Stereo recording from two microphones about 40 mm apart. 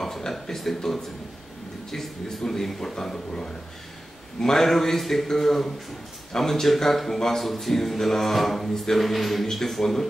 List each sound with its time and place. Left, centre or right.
0.0 s speech: centre